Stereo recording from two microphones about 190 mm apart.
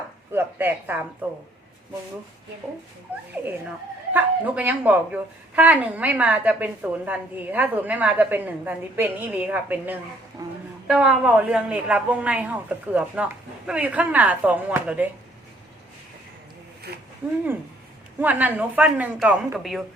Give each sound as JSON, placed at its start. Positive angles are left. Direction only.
{"t": 0.3, "sound": "speech", "side_deg": -10}
{"t": 4.1, "sound": "a woman's voice", "side_deg": -10}
{"t": 10.4, "sound": "speech", "side_deg": -20}
{"t": 10.8, "sound": "a woman's voice", "side_deg": -5}
{"t": 16.9, "sound": "speech", "side_deg": -55}
{"t": 18.2, "sound": "a woman's voice", "side_deg": -10}